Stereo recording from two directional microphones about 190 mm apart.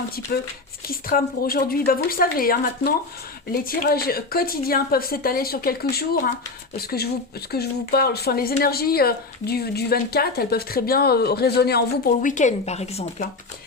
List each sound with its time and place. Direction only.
0.3 s speech: 55° left (ahead or behind); by 13.2 s 35° left (ahead or behind)